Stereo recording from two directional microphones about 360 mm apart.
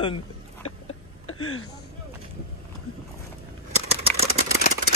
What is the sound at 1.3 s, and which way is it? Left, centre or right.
Speech, left.